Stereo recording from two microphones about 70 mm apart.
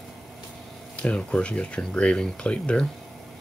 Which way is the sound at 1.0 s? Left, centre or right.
Centre.